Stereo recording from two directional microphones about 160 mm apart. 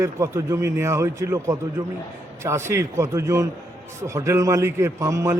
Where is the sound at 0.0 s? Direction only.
20° right (ahead or behind).